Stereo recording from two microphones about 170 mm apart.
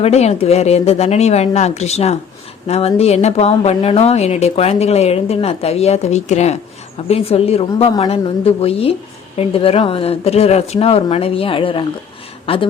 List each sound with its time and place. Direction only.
0.0 s speech: 40° left (ahead or behind)